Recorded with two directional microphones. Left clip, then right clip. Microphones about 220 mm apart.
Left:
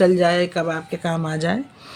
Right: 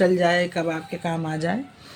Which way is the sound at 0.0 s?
30° left (ahead or behind).